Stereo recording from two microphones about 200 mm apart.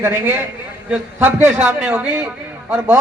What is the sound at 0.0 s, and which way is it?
A man's voice, 10° right (ahead or behind).